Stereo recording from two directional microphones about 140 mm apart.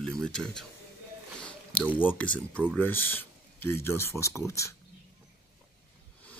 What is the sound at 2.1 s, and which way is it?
Speech, 10° left (ahead or behind).